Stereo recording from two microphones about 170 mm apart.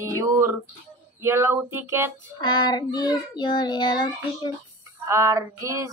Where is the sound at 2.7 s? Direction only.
25° left (ahead or behind).